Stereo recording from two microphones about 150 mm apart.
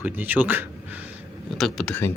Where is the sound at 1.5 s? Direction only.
Centre (ahead or behind).